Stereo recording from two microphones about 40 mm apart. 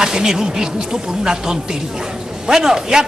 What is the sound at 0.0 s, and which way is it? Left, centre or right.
A man's voice, centre.